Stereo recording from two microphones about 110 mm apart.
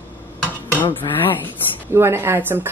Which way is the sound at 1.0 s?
40° left (ahead or behind).